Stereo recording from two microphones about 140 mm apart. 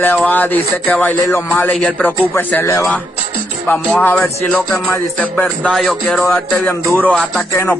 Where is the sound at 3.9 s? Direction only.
10° left (ahead or behind).